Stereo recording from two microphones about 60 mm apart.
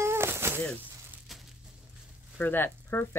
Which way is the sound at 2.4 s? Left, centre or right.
Left.